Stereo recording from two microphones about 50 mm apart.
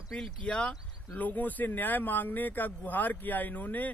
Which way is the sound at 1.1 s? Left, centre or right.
Left.